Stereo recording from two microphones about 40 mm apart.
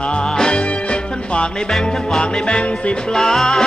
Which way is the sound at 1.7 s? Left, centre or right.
Centre.